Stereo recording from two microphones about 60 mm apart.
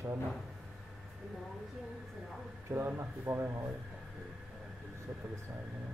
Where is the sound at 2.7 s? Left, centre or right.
Right.